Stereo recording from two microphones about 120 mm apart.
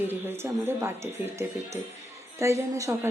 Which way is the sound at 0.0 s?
15° right (ahead or behind).